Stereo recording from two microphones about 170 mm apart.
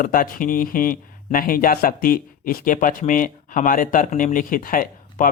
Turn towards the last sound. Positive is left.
turn(degrees=55)  # may be behind; listen again after turning